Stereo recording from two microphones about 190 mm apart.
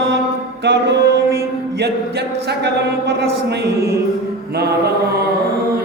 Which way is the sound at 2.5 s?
60° right (ahead or behind).